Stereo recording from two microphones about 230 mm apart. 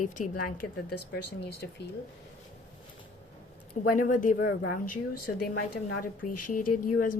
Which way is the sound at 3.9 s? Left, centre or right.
Left.